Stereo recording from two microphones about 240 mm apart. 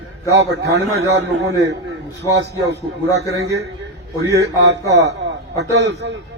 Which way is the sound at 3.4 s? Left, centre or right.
Right.